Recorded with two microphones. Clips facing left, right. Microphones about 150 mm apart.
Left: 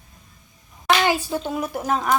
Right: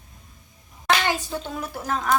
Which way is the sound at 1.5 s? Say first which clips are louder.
Left 4 dB; 20° left (ahead or behind).